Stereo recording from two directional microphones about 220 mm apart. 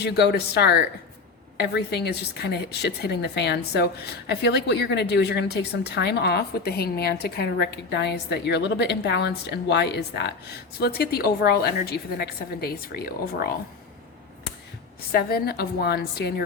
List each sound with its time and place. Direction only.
0.0 s a woman's voice: 50° left (ahead or behind)
15.1 s a woman's voice: 45° left (ahead or behind)